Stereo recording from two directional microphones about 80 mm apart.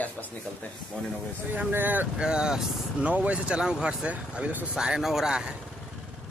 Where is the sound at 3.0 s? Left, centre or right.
Centre.